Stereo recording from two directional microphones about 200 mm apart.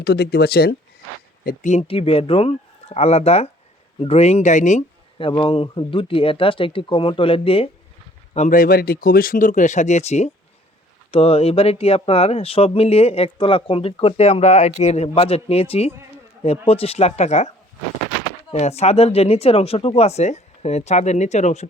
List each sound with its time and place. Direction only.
0.0 s speech: 55° left (ahead or behind)
1.5 s speech: 35° left (ahead or behind)
8.3 s speech: 40° left (ahead or behind)
18.5 s speech: 30° left (ahead or behind)